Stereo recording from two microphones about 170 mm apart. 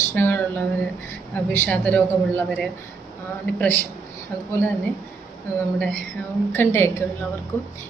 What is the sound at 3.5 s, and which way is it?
Speech, 10° left (ahead or behind).